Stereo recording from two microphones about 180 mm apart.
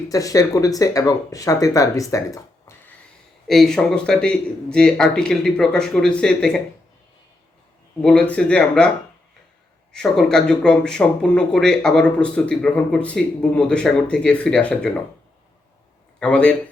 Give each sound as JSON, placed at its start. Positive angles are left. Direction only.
{"t": 0.1, "sound": "speech", "side_deg": 20}
{"t": 3.4, "sound": "speech", "side_deg": 0}
{"t": 8.0, "sound": "speech", "side_deg": 5}
{"t": 9.9, "sound": "speech", "side_deg": 5}
{"t": 16.2, "sound": "speech", "side_deg": 5}